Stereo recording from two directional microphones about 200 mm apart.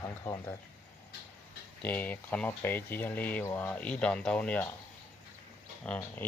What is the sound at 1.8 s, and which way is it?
Speech, 10° left (ahead or behind).